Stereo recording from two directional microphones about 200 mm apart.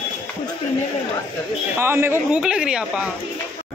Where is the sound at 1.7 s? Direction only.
10° right (ahead or behind).